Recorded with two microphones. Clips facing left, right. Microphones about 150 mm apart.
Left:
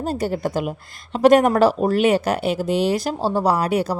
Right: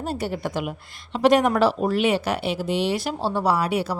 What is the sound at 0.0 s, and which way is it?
Speech, 40° left (ahead or behind).